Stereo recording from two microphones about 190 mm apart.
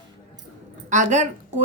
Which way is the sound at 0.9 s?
40° right (ahead or behind).